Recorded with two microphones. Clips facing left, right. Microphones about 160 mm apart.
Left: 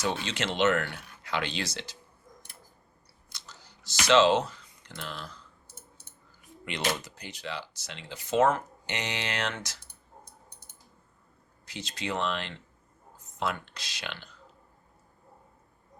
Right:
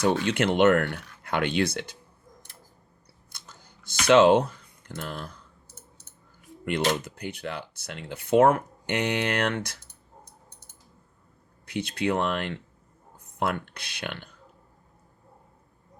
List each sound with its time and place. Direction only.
0.0 s speech: 55° right (ahead or behind)
3.2 s scissors: 55° right (ahead or behind)
6.7 s speech: 55° right (ahead or behind)
11.6 s speech: 60° right (ahead or behind)